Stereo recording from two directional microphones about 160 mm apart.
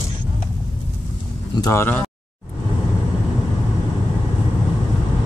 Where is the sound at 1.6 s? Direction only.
15° left (ahead or behind).